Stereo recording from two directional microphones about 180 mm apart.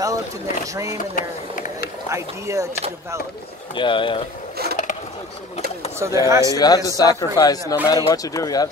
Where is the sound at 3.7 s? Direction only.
25° left (ahead or behind).